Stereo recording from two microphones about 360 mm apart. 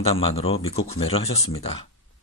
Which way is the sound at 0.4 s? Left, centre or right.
Centre.